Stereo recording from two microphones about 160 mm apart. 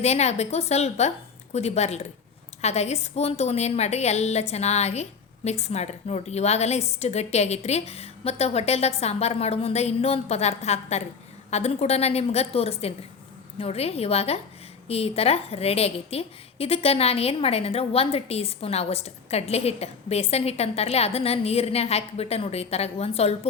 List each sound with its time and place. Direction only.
0.0 s a woman's voice: 45° left (ahead or behind)